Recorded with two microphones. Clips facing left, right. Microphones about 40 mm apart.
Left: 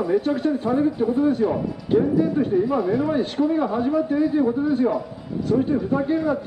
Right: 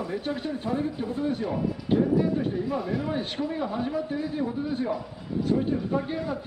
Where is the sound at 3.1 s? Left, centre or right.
Centre.